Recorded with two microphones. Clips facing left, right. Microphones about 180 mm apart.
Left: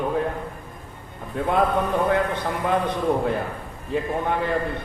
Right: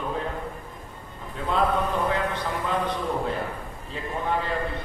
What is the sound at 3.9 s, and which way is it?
Speech, 55° left (ahead or behind).